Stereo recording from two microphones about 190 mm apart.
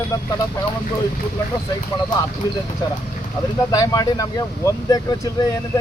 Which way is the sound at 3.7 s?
20° left (ahead or behind).